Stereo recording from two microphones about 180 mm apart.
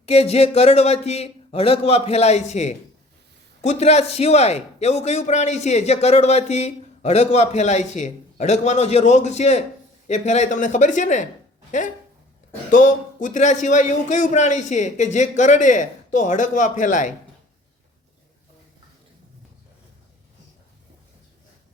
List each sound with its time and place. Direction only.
0.0 s a man's voice: 35° left (ahead or behind)
12.7 s a man's voice: 45° left (ahead or behind)